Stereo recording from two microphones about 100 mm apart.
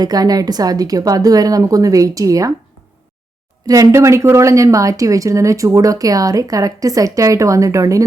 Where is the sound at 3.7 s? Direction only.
30° right (ahead or behind).